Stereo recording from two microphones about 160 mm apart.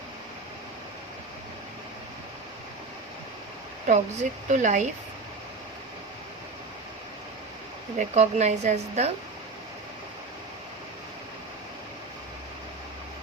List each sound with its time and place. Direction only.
3.8 s a woman's voice: 50° right (ahead or behind)
7.9 s a woman's voice: 45° right (ahead or behind)